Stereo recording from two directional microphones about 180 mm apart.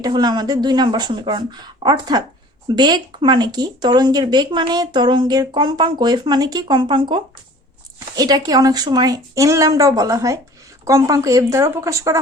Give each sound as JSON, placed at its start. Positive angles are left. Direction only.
{"t": 0.0, "sound": "speech", "side_deg": -20}